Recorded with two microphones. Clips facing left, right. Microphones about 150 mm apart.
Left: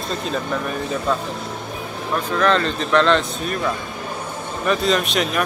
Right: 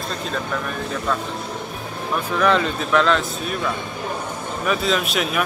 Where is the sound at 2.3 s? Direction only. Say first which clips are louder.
Even; 5° right (ahead or behind).